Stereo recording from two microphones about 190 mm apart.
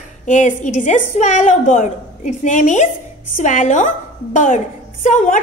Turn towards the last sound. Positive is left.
turn(degrees=40)  # may be behind; listen again after turning